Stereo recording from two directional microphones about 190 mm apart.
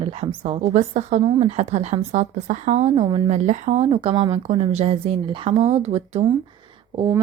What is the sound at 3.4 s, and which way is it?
A woman's voice, 35° right (ahead or behind).